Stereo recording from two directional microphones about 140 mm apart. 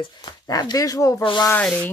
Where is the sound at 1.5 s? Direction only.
10° left (ahead or behind).